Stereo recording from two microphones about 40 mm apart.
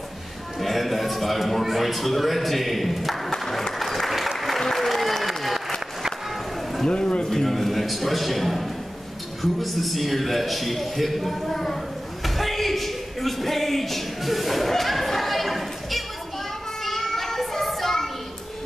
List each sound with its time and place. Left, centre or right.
0.6 s a man's voice: centre
3.3 s applause: centre
6.9 s a man's voice: left
7.2 s a man's voice: centre
9.4 s a sound: centre
16.8 s child singing: centre